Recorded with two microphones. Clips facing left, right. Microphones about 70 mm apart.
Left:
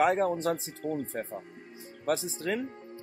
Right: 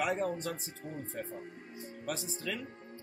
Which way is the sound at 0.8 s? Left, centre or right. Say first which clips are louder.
Left 10 dB; left.